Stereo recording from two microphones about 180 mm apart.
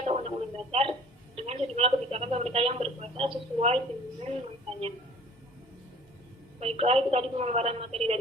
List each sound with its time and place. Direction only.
0.0 s a woman's voice: 35° right (ahead or behind)
6.6 s a woman's voice: 35° right (ahead or behind)